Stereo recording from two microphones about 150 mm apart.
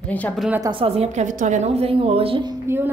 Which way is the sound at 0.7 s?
40° right (ahead or behind).